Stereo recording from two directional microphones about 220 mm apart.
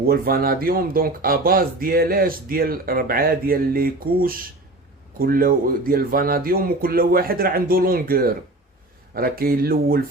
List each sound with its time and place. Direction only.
0.0 s speech: 45° right (ahead or behind)